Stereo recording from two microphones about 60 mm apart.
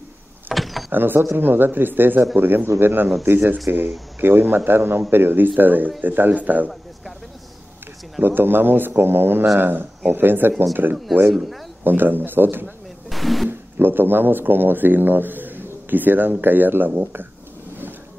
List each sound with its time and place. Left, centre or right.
0.6 s power windows: centre
0.9 s a man's voice: right
8.2 s a man's voice: right
11.3 s speech: centre
11.8 s a man's voice: right
13.1 s a sound: centre
13.7 s a man's voice: right